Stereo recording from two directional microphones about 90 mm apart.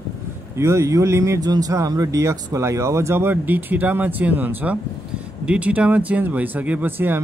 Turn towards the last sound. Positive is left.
turn(degrees=-20)  # may be behind; listen again after turning